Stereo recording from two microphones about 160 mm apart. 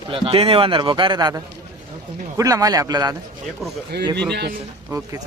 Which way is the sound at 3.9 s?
90° right.